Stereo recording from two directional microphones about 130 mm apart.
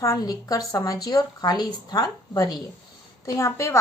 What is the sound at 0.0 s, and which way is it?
Speech, 25° left (ahead or behind).